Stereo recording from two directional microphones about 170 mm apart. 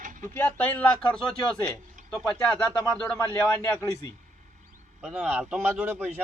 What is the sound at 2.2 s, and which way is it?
A man's voice, 10° left (ahead or behind).